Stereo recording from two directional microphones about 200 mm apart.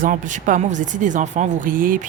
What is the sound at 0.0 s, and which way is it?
Speech, 40° right (ahead or behind).